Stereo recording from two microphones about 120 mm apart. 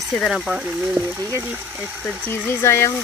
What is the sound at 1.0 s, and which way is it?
Speech, 20° right (ahead or behind).